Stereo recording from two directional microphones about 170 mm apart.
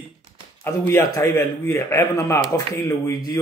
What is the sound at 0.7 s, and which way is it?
Speech, 15° left (ahead or behind).